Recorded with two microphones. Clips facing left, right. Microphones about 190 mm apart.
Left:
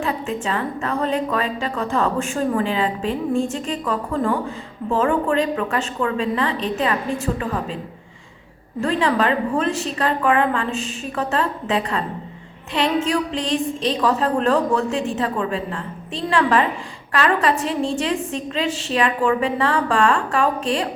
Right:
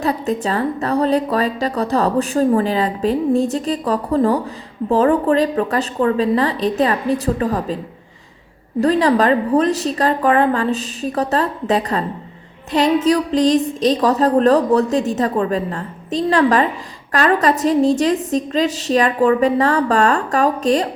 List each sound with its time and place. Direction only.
0.0 s a woman's voice: 40° right (ahead or behind)
8.8 s a woman's voice: 40° right (ahead or behind)